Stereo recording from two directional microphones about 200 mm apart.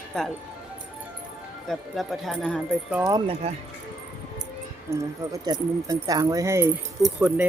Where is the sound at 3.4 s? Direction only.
30° right (ahead or behind).